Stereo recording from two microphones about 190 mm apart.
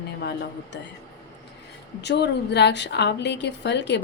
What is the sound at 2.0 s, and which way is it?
A woman's voice, 65° left (ahead or behind).